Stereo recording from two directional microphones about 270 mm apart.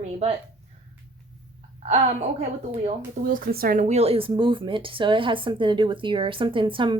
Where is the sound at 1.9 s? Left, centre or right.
Right.